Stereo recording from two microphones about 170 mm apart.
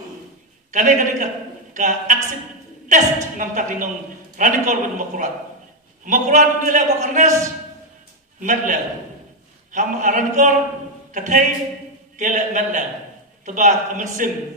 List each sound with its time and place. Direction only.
0.7 s a man's voice: 45° right (ahead or behind)
8.4 s a man's voice: 50° right (ahead or behind)